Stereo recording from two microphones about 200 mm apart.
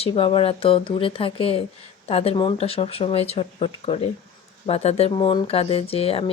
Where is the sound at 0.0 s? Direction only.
25° left (ahead or behind).